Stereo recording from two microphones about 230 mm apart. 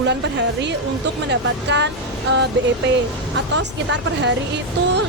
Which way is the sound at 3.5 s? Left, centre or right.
Right.